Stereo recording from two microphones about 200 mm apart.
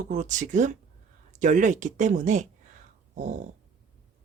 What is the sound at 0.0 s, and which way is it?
Speech, 40° right (ahead or behind).